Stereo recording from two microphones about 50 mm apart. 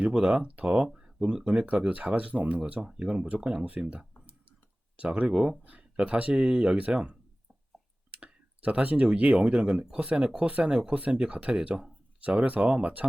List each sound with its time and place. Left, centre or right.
0.1 s speech: centre
0.9 s a sound: centre
1.9 s speech: right
5.3 s speech: centre